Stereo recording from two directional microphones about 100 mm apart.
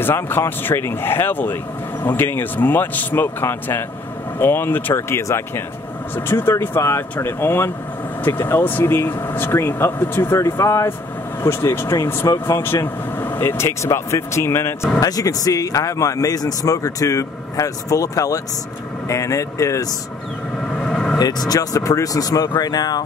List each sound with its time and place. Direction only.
0.0 s a man's voice: 25° left (ahead or behind)
12.6 s speech: 20° left (ahead or behind)
15.0 s a man's voice: 35° left (ahead or behind)
20.7 s vehicle: 10° left (ahead or behind)
21.2 s a man's voice: 40° left (ahead or behind)